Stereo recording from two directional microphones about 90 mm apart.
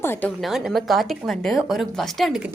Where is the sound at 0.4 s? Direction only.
Centre (ahead or behind).